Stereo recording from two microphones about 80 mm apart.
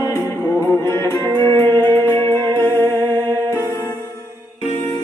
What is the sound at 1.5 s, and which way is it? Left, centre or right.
Music, right.